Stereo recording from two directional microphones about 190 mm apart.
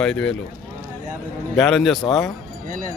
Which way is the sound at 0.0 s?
5° left (ahead or behind).